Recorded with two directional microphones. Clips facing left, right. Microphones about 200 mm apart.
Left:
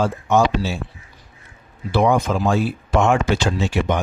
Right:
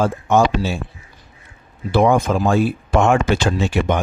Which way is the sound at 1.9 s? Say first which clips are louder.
Right 2 dB; 50° right (ahead or behind).